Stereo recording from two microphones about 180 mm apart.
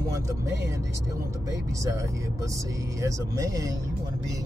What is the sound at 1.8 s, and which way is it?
Speech, 15° right (ahead or behind).